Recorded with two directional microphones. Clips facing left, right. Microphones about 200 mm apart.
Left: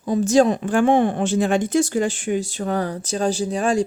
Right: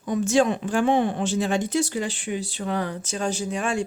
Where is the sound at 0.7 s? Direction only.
50° left (ahead or behind).